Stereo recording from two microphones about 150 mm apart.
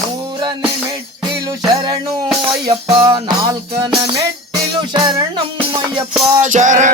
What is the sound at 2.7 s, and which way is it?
Music, 35° right (ahead or behind).